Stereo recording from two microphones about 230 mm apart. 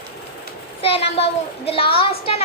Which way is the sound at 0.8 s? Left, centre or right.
Left.